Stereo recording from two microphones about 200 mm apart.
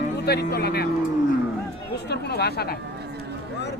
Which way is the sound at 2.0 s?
55° left (ahead or behind).